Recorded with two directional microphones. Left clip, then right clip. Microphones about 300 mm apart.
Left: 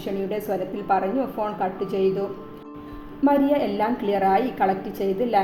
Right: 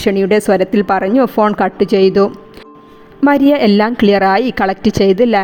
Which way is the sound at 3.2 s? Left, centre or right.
Right.